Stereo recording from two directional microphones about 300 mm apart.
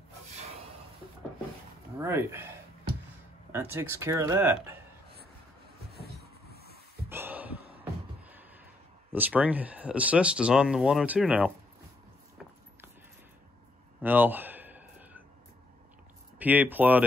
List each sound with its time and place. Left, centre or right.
2.0 s speech: centre
3.5 s speech: centre
5.9 s vehicle: right
7.1 s gasp: centre
7.8 s beatboxing: centre
9.1 s speech: centre
14.0 s a sound: centre
16.3 s speech: centre